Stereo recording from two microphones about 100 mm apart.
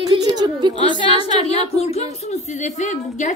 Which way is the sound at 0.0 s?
40° right (ahead or behind).